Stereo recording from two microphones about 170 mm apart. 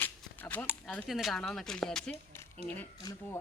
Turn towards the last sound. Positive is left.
turn(degrees=20)  # may be behind; listen again after turning